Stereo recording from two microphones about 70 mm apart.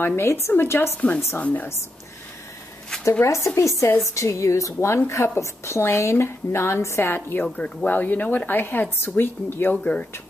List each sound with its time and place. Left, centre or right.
0.0 s speech: left
1.4 s a woman's voice: left
3.1 s a woman's voice: left